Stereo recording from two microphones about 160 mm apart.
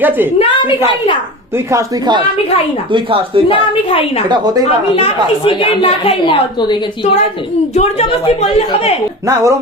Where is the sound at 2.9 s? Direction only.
35° right (ahead or behind).